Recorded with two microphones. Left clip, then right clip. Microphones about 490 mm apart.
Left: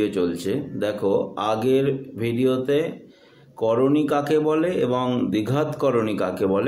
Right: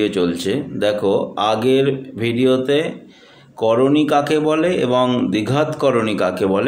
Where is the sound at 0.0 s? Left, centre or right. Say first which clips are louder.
Right 5 dB; left.